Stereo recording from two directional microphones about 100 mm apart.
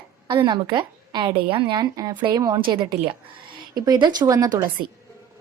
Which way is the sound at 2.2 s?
50° right (ahead or behind).